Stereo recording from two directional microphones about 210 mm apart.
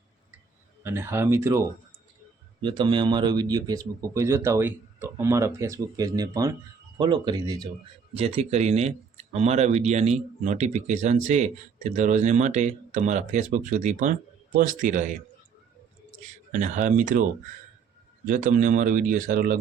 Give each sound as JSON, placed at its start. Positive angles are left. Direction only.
{"t": 0.9, "sound": "a man's voice", "side_deg": -10}
{"t": 8.1, "sound": "speech", "side_deg": -30}
{"t": 16.5, "sound": "speech", "side_deg": -35}
{"t": 18.3, "sound": "speech", "side_deg": -40}